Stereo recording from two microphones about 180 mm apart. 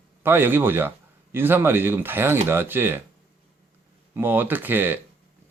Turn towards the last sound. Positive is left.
turn(degrees=-10)  # may be behind; listen again after turning